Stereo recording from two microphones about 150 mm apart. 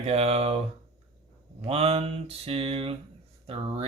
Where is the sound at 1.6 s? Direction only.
40° right (ahead or behind).